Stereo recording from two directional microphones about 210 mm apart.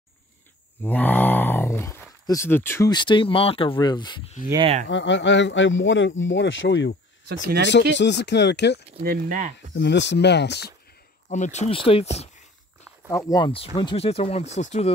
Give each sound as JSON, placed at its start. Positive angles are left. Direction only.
{"t": 0.8, "sound": "speech", "side_deg": 10}
{"t": 4.8, "sound": "speech", "side_deg": 60}
{"t": 7.2, "sound": "speech", "side_deg": -50}
{"t": 8.0, "sound": "speech", "side_deg": 55}
{"t": 9.0, "sound": "speech", "side_deg": -45}
{"t": 9.8, "sound": "speech", "side_deg": 55}
{"t": 11.2, "sound": "speech", "side_deg": 35}
{"t": 13.1, "sound": "speech", "side_deg": 15}